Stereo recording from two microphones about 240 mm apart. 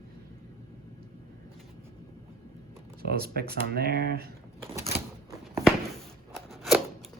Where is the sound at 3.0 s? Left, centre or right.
Right.